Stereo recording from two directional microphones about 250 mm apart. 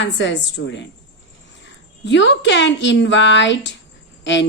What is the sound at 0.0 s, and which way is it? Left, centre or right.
Speech, left.